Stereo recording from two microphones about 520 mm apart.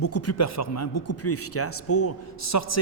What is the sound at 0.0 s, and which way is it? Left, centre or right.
Speech, left.